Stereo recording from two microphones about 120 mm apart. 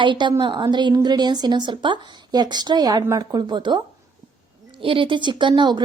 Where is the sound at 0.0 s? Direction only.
40° right (ahead or behind).